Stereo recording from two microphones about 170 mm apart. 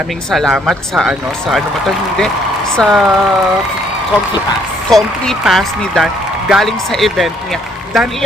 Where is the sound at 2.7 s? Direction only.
Centre (ahead or behind).